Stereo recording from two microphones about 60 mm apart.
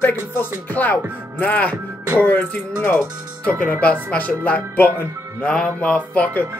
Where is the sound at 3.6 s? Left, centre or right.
Left.